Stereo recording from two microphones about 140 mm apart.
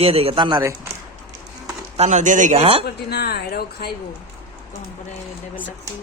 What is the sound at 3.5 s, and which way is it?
Speech, 90° left.